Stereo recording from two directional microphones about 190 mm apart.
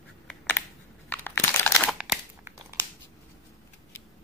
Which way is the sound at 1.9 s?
5° right (ahead or behind).